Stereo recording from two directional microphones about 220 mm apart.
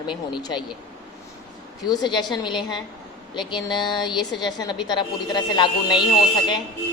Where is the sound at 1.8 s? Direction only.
20° left (ahead or behind).